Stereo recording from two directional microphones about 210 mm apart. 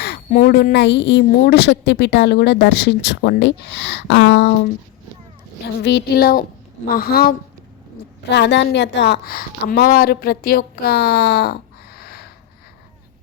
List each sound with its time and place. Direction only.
0.3 s a woman's voice: 40° left (ahead or behind); by 4.5 s 55° left (ahead or behind)
5.6 s a woman's voice: 50° left (ahead or behind)
8.3 s a woman's voice: 55° left (ahead or behind)